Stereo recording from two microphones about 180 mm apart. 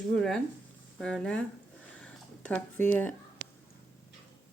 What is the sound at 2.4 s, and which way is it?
Speech, 10° left (ahead or behind).